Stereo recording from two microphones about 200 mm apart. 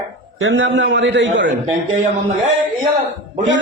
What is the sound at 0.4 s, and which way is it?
A man's voice, 75° right (ahead or behind).